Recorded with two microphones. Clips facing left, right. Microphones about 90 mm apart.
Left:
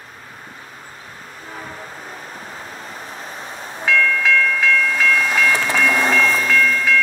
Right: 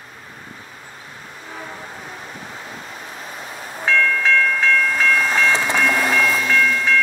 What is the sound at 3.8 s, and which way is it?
Train, 35° right (ahead or behind).